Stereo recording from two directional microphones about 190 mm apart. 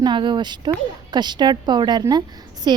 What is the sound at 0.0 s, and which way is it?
A woman's voice, 25° right (ahead or behind).